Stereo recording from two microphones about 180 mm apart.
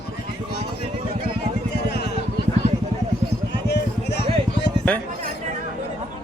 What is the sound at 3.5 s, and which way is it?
Vehicle, 65° left (ahead or behind).